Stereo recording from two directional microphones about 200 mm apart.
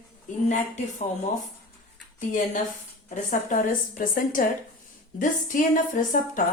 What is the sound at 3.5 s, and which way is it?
A woman's voice, 45° left (ahead or behind).